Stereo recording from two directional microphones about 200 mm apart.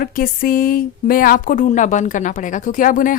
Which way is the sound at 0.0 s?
45° left (ahead or behind).